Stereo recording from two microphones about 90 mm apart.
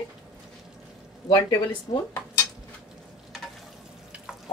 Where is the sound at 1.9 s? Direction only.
90° left.